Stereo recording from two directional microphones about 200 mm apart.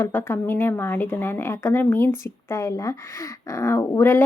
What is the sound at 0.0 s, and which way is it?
Speech, 10° left (ahead or behind).